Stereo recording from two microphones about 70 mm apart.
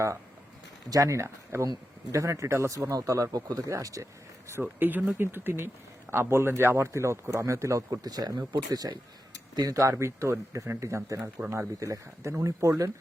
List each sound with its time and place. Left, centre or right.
0.9 s speech: right
4.6 s a man's voice: right
7.9 s speech: right
9.7 s speech: right
11.4 s a man's voice: right
11.8 s speech: right